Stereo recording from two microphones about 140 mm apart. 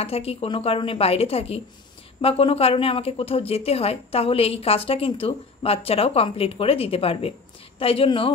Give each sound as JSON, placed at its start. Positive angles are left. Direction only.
{"t": 0.0, "sound": "speech", "side_deg": 45}